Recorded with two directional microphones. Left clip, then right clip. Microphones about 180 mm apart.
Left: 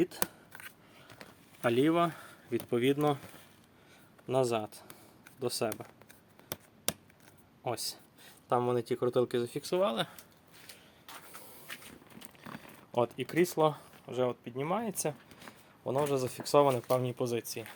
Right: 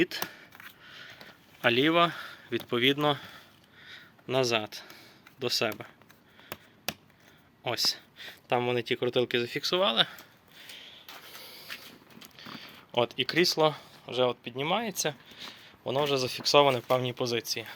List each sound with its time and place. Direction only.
1.2 s speech: 5° left (ahead or behind)
4.3 s speech: 5° left (ahead or behind)
7.6 s speech: 5° left (ahead or behind)
8.8 s speech: 20° right (ahead or behind)
9.5 s speech: 10° left (ahead or behind)
12.4 s zipper: 10° left (ahead or behind)
14.1 s speech: 5° right (ahead or behind)
14.8 s speech: 10° left (ahead or behind)